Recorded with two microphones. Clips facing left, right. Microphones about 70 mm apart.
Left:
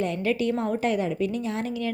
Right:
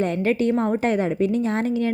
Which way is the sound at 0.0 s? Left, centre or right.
Right.